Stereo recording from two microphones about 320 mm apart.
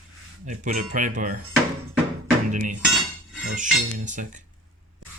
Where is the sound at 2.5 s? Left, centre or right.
Right.